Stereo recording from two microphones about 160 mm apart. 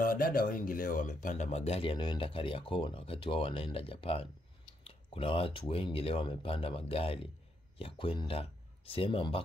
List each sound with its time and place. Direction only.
0.0 s speech: 65° left (ahead or behind); by 9.4 s 35° left (ahead or behind)